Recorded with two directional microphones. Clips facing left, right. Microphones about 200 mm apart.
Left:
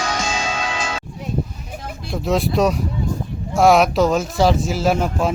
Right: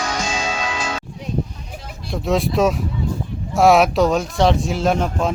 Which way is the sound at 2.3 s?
Centre (ahead or behind).